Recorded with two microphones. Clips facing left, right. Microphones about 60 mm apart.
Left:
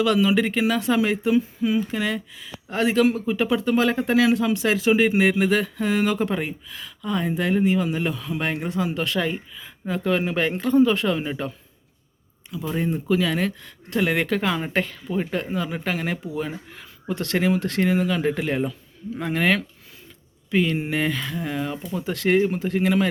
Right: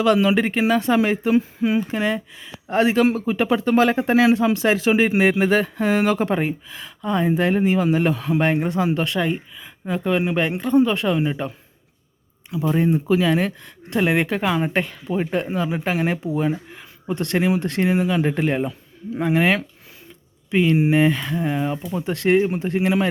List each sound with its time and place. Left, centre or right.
0.0 s speech: right
3.9 s speech: right
9.0 s speech: centre
12.5 s speech: right
15.1 s speech: right
20.7 s speech: centre